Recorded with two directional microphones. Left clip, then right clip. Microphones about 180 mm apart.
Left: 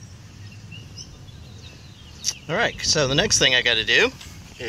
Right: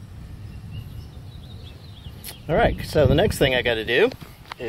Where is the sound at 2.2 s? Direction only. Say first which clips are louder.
Right 2 dB; 25° right (ahead or behind).